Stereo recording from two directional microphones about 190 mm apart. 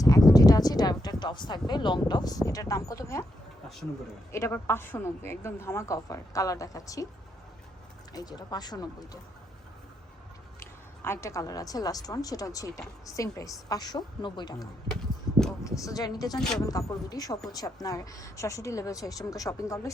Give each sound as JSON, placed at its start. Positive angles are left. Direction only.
{"t": 0.3, "sound": "speech", "side_deg": 20}
{"t": 4.3, "sound": "a woman's voice", "side_deg": 15}
{"t": 8.1, "sound": "speech", "side_deg": 20}
{"t": 10.6, "sound": "a woman's voice", "side_deg": 15}
{"t": 15.3, "sound": "a sound", "side_deg": 0}
{"t": 15.6, "sound": "speech", "side_deg": 15}
{"t": 16.4, "sound": "speech", "side_deg": 5}
{"t": 16.6, "sound": "a woman's voice", "side_deg": 20}